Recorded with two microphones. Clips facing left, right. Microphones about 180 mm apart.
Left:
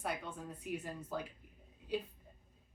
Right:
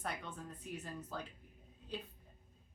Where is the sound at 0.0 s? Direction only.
10° left (ahead or behind).